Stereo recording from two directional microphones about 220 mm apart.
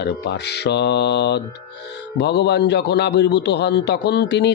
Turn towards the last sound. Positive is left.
turn(degrees=50)  # may be behind; listen again after turning